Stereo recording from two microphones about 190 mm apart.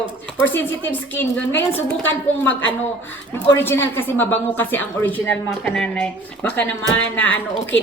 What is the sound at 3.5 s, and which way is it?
Speech, 10° left (ahead or behind).